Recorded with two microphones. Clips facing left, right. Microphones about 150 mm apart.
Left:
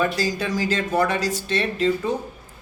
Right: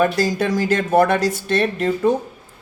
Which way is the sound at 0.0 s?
55° right (ahead or behind).